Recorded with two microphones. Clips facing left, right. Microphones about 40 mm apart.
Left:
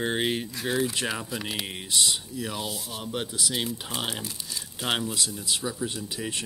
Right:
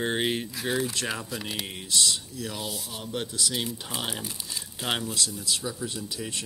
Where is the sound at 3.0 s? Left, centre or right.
Centre.